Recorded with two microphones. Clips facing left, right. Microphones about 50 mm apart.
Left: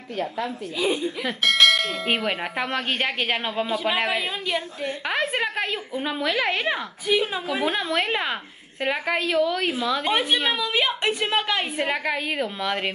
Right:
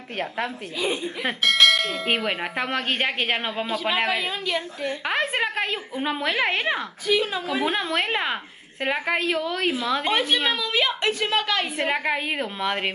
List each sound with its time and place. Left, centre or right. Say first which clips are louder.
0.8 s bell: left 1 dB; centre
5.0 s a woman's voice: even; centre
7.4 s bell: even; centre
8.8 s a woman's voice: even; centre
9.8 s bell: even; centre
10.1 s a woman's voice: even; centre
11.8 s a woman's voice: right 1 dB; centre